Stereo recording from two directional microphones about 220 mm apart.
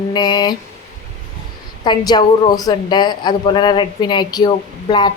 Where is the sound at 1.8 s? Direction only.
20° left (ahead or behind).